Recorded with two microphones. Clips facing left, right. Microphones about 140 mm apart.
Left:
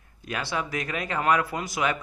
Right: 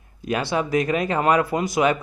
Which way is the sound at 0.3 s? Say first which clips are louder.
Right 8 dB; 20° right (ahead or behind).